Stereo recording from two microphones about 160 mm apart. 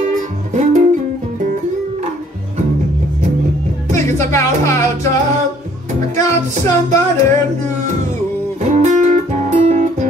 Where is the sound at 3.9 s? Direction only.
15° left (ahead or behind).